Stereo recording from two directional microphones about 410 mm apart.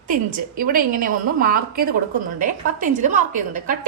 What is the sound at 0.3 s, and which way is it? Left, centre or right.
A woman's voice, centre.